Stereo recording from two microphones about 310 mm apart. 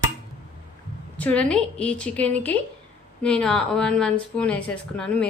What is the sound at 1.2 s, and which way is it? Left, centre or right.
Speech, centre.